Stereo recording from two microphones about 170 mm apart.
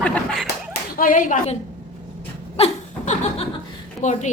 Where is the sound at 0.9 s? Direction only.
55° left (ahead or behind).